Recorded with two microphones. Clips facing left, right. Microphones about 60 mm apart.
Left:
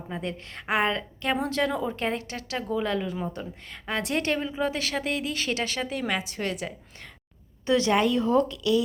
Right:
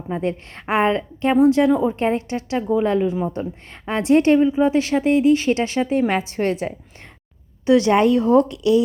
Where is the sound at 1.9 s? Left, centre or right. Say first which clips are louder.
Right 9 dB; right.